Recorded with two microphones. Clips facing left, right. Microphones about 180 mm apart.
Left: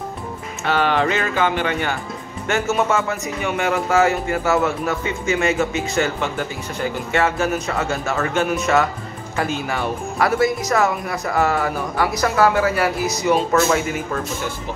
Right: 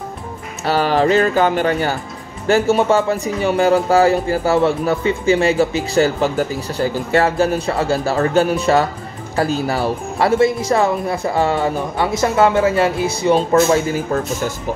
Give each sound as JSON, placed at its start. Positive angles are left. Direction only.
{"t": 0.7, "sound": "a man's voice", "side_deg": -35}